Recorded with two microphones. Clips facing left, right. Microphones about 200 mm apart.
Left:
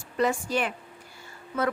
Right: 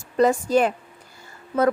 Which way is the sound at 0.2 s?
40° right (ahead or behind).